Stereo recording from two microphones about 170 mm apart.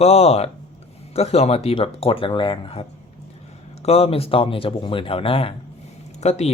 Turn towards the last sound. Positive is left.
turn(degrees=40)  # may be behind; listen again after turning